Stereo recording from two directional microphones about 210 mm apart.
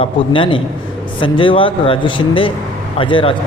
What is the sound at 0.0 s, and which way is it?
Speech, 25° left (ahead or behind).